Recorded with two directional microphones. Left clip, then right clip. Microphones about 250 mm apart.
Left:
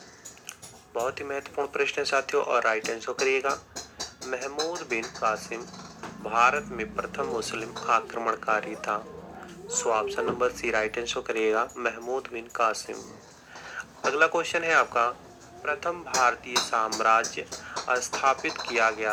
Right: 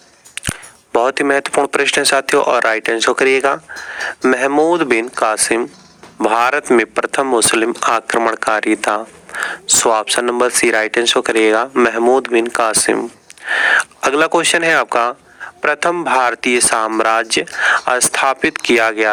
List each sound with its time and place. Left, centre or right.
0.9 s speech: right